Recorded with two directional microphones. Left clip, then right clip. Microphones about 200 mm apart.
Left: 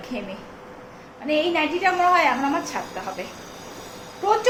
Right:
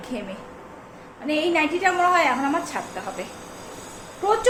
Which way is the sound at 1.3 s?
Centre (ahead or behind).